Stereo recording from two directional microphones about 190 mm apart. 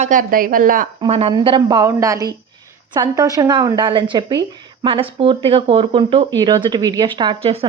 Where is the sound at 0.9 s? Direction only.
30° right (ahead or behind).